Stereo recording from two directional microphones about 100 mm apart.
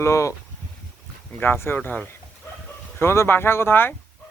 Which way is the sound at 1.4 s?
25° left (ahead or behind).